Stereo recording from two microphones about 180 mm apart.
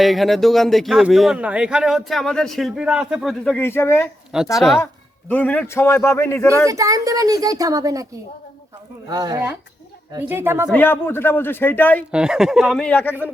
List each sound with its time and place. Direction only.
0.0 s speech: centre (ahead or behind)
4.5 s speech: centre (ahead or behind)
5.3 s a man's voice: 10° left (ahead or behind)
6.7 s speech: 20° right (ahead or behind)
9.0 s speech: 20° right (ahead or behind)
10.7 s a man's voice: 10° left (ahead or behind)
12.1 s speech: 5° right (ahead or behind)